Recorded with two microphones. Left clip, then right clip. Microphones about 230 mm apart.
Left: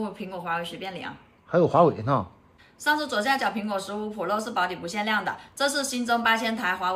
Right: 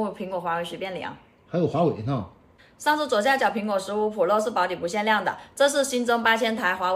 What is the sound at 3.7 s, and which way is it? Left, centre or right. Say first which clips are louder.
Speech: right 6 dB; centre.